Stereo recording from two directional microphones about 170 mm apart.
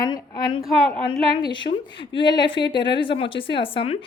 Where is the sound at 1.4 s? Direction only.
25° left (ahead or behind).